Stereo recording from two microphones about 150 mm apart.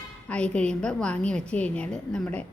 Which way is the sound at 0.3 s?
5° left (ahead or behind).